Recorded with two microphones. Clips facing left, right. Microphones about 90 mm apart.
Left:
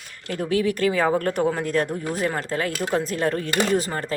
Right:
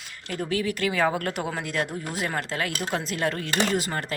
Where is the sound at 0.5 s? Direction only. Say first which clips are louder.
Left 6 dB; 45° left (ahead or behind).